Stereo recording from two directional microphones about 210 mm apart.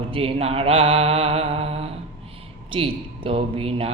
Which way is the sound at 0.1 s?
25° right (ahead or behind).